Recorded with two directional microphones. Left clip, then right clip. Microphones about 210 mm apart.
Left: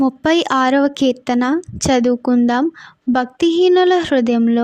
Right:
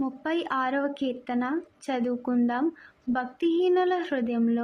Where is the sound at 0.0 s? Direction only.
55° left (ahead or behind).